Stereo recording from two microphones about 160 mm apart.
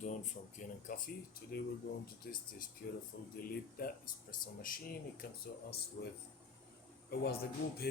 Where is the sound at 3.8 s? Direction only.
60° left (ahead or behind).